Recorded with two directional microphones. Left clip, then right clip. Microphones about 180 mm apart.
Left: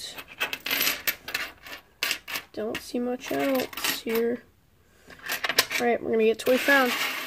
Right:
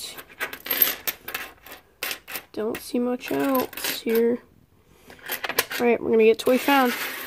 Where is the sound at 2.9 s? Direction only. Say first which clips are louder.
Right 4 dB; 50° right (ahead or behind).